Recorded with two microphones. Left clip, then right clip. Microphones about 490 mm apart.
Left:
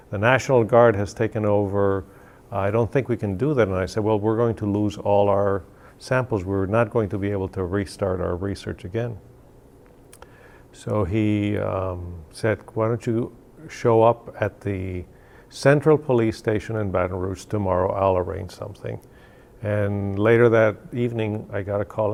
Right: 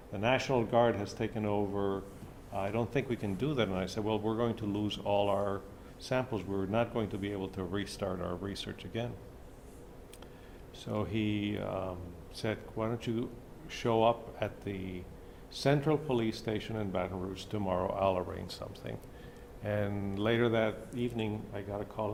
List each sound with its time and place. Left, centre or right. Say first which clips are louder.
0.1 s speech: left 12 dB; left
10.8 s speech: left 12 dB; left